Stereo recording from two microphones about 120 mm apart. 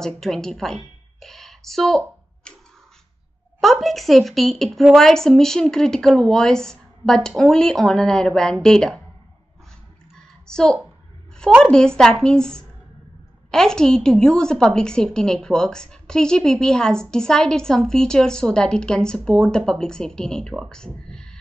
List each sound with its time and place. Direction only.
0.0 s a woman's voice: 5° left (ahead or behind)
3.6 s a woman's voice: centre (ahead or behind)
10.4 s a child's voice: 5° left (ahead or behind)